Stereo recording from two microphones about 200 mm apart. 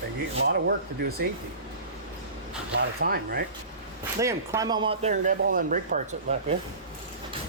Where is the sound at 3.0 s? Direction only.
50° right (ahead or behind).